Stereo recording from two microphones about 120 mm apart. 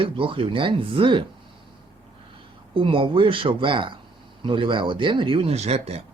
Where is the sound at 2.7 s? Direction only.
45° right (ahead or behind).